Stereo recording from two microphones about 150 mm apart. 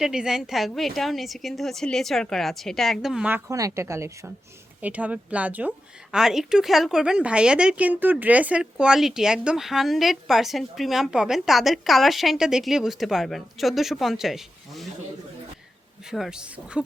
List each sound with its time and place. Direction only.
0.0 s a woman's voice: 5° right (ahead or behind)
3.5 s a woman's voice: 20° right (ahead or behind); by 14.8 s centre (ahead or behind)
16.0 s a woman's voice: centre (ahead or behind)